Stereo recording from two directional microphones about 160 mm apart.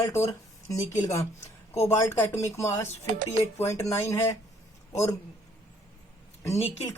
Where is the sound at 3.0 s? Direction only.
50° right (ahead or behind).